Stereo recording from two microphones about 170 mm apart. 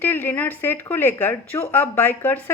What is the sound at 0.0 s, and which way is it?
A woman's voice, 10° left (ahead or behind).